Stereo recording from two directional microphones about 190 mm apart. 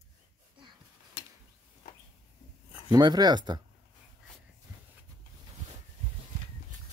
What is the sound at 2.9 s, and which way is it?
Speech, 20° right (ahead or behind).